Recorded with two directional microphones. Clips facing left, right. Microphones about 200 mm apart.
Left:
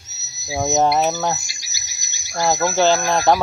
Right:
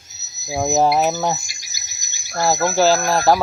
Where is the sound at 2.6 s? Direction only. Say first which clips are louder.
Right 1 dB; centre (ahead or behind).